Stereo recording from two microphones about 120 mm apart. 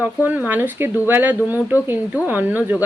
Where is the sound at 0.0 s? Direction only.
15° right (ahead or behind).